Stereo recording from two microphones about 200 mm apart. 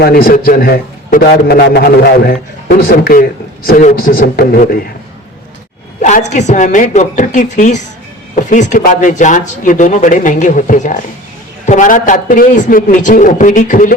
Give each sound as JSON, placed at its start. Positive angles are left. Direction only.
{"t": 0.0, "sound": "a man's voice", "side_deg": 50}
{"t": 6.0, "sound": "speech", "side_deg": 35}